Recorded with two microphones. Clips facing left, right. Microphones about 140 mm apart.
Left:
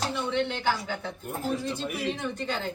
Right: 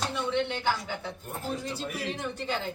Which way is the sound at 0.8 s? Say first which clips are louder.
Left 2 dB; 10° right (ahead or behind).